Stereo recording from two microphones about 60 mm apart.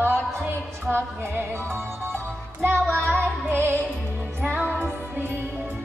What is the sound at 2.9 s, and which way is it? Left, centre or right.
Music, right.